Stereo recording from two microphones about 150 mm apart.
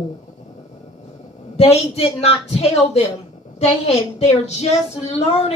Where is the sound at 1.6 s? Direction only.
40° left (ahead or behind).